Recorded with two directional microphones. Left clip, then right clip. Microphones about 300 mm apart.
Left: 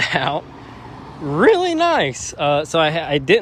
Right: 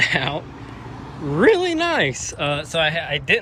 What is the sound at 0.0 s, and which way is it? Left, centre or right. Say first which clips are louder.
Speech: left 1 dB; centre.